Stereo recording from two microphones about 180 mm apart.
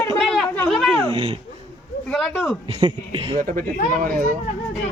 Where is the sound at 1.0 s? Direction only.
30° right (ahead or behind).